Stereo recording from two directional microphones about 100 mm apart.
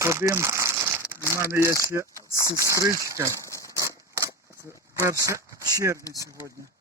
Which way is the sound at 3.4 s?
30° left (ahead or behind).